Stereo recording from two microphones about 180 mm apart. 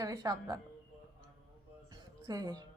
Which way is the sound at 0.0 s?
20° right (ahead or behind).